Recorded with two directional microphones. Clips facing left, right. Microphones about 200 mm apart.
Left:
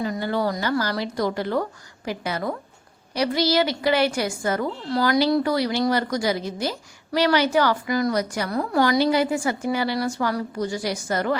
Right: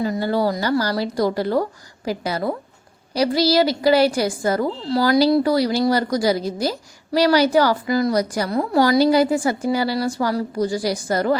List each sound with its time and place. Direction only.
0.0 s a woman's voice: 35° right (ahead or behind)